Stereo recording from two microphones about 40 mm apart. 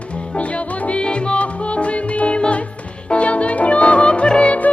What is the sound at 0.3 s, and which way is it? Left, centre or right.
Music, left.